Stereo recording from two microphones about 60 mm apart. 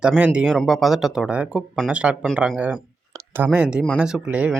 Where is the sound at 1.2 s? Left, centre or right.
Centre.